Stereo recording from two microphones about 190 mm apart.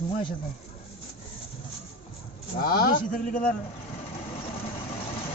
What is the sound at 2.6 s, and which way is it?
Speech, 55° left (ahead or behind).